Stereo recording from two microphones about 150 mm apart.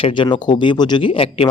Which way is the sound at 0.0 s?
30° left (ahead or behind).